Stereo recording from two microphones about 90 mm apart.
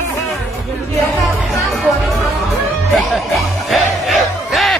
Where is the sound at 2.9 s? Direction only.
Centre (ahead or behind).